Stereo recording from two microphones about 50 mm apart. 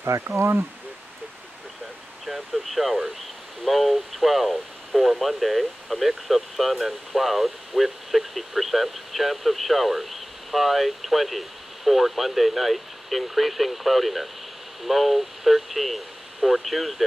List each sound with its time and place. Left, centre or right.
0.0 s speech: right
2.2 s speech: centre